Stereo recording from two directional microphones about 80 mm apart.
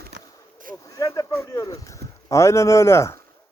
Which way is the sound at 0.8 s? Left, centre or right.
Left.